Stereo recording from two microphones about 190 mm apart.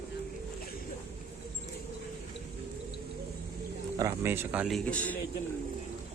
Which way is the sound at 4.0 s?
10° right (ahead or behind).